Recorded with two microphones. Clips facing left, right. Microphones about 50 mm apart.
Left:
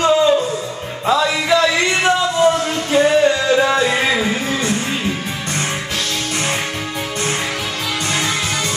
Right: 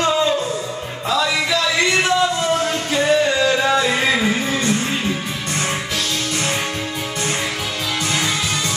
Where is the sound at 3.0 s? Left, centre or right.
Centre.